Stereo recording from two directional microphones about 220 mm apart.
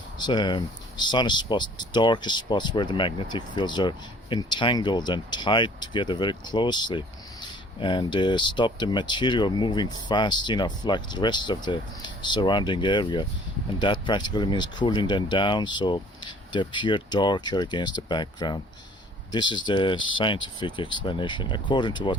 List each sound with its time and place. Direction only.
0.2 s speech: 20° left (ahead or behind)